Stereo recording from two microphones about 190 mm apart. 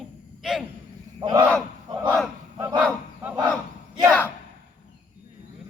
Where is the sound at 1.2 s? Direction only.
25° right (ahead or behind).